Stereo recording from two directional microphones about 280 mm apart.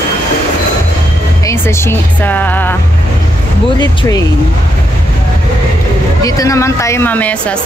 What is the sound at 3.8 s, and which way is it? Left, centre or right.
Speech, centre.